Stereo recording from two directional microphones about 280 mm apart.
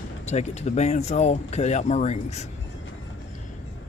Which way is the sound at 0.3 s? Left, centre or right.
Left.